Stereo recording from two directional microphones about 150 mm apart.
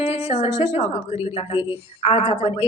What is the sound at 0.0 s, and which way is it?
Speech, 45° left (ahead or behind).